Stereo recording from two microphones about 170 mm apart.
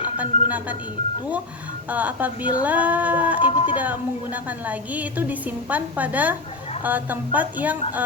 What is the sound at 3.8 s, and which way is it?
A woman's voice, 10° right (ahead or behind).